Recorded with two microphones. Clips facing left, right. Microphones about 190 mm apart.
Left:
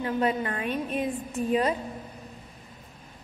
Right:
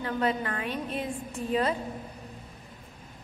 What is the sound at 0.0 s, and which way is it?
A woman's voice, 20° left (ahead or behind).